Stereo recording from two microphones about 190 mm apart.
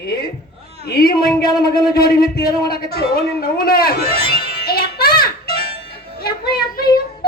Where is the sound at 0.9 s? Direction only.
55° left (ahead or behind).